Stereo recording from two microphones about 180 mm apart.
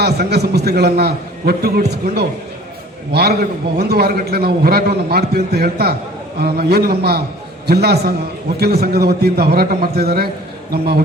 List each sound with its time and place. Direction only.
0.0 s a man's voice: 65° right (ahead or behind)
3.1 s a man's voice: 60° right (ahead or behind)